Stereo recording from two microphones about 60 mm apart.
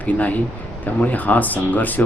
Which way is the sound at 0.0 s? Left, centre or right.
Left.